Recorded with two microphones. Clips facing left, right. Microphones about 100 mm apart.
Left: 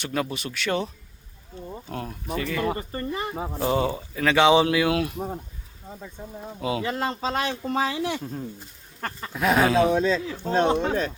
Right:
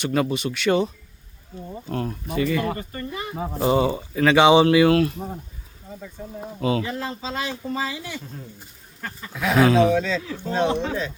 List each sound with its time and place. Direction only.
0.0 s speech: centre (ahead or behind)
1.9 s speech: centre (ahead or behind)
2.7 s speech: 30° left (ahead or behind)
3.4 s speech: 5° right (ahead or behind)
4.9 s speech: 10° left (ahead or behind)
6.6 s speech: 5° left (ahead or behind)
7.7 s speech: 60° left (ahead or behind)
9.6 s speech: 5° left (ahead or behind)
9.9 s speech: 35° left (ahead or behind)